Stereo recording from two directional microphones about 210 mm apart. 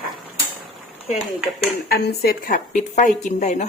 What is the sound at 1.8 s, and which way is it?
A woman's voice, 50° left (ahead or behind).